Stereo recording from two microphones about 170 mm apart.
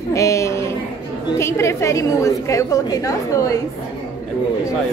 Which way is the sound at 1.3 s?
15° left (ahead or behind).